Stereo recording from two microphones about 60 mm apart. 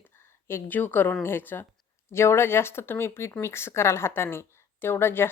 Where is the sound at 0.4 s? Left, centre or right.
Left.